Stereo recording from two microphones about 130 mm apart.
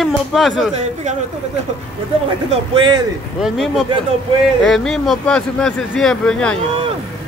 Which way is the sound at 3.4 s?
Centre (ahead or behind).